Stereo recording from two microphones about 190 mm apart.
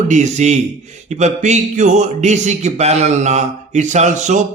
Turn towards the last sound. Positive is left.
turn(degrees=-40)  # may be behind; listen again after turning